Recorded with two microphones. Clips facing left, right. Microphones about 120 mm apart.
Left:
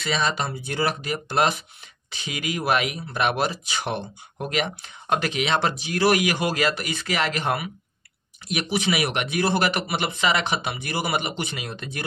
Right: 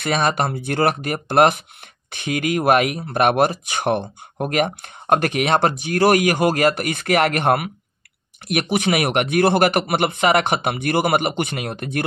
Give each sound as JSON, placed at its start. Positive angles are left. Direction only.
{"t": 0.0, "sound": "a man's voice", "side_deg": -55}